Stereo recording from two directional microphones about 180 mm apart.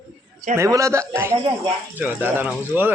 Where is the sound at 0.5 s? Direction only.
15° right (ahead or behind).